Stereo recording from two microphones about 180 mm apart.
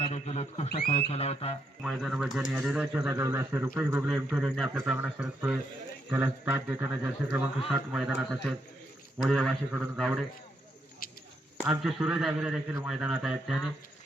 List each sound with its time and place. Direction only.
0.0 s a sound: 35° left (ahead or behind)
0.9 s speech: 35° left (ahead or behind)
1.8 s a man's voice: centre (ahead or behind)
3.1 s a man's voice: 15° right (ahead or behind)
11.6 s a man's voice: 5° right (ahead or behind)